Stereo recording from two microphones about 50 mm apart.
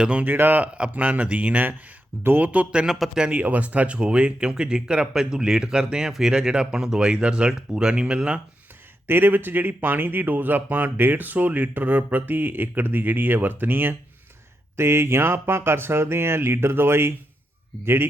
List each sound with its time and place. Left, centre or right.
0.0 s speech: right
0.3 s speech: right
0.6 s speech: right
2.2 s speech: right
2.5 s speech: right
2.8 s speech: centre
3.4 s speech: right
9.0 s speech: right
14.8 s speech: right